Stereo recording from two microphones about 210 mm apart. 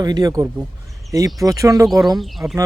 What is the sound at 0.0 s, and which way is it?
Speech, 20° right (ahead or behind).